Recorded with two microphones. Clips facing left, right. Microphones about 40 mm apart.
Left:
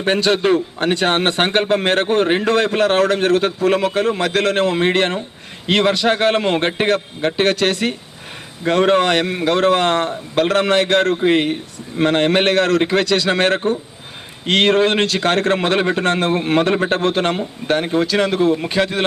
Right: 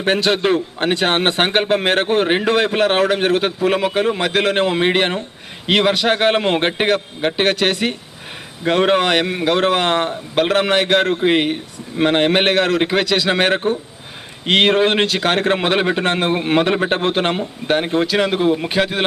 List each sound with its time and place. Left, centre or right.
0.0 s a man's voice: centre